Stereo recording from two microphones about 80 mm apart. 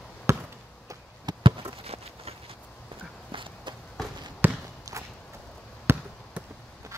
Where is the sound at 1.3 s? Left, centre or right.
Right.